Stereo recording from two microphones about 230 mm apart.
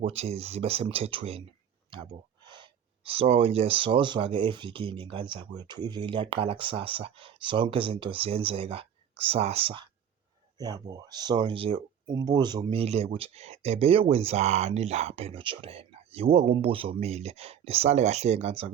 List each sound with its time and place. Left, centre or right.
0.0 s speech: right